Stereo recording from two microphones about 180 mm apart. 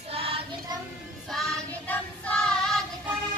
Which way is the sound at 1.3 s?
5° left (ahead or behind).